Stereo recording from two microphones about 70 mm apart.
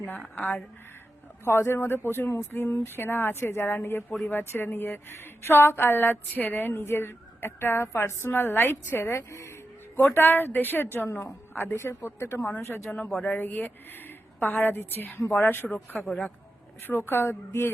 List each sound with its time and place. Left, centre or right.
1.5 s speech: left
10.2 s speech: left
13.1 s a woman's voice: left